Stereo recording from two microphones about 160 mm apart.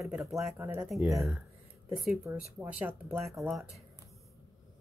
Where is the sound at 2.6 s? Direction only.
10° right (ahead or behind).